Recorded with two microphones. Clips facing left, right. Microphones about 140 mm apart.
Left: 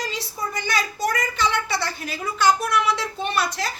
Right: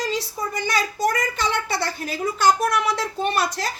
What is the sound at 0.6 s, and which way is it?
A woman's voice, 45° right (ahead or behind).